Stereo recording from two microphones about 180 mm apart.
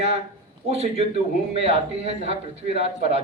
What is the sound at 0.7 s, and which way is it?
Speech, 35° right (ahead or behind).